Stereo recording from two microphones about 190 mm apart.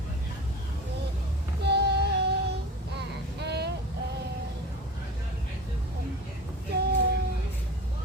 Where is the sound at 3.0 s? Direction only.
60° right (ahead or behind).